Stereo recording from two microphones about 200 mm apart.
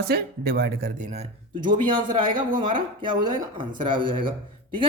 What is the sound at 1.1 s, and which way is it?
Speech, 30° right (ahead or behind).